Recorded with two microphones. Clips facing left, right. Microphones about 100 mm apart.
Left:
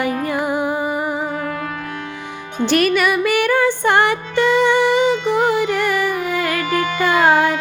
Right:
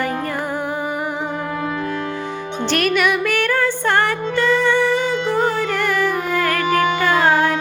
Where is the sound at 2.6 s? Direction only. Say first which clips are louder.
Left 3 dB; 5° left (ahead or behind).